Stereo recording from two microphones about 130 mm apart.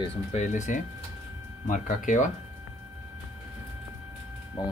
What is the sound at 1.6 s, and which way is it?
Speech, 85° left.